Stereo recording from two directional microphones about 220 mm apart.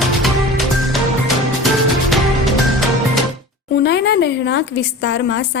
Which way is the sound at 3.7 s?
45° left (ahead or behind).